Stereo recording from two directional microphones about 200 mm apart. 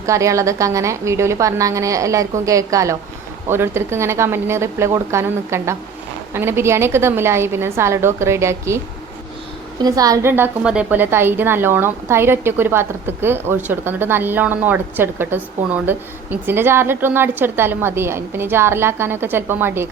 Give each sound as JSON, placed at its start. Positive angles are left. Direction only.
{"t": 0.0, "sound": "a woman's voice", "side_deg": -15}
{"t": 9.8, "sound": "a woman's voice", "side_deg": -20}